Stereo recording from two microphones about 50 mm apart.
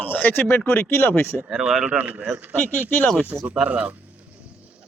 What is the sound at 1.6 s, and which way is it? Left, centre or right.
Speech, centre.